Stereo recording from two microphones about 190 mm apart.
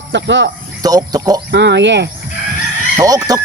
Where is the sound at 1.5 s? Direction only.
65° right (ahead or behind).